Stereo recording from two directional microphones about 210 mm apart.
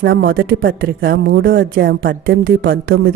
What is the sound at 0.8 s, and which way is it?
Speech, 45° right (ahead or behind).